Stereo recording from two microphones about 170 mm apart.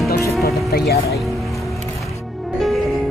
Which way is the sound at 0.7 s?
70° left (ahead or behind).